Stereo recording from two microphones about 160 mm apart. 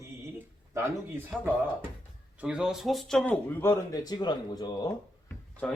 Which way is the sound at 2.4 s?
5° right (ahead or behind).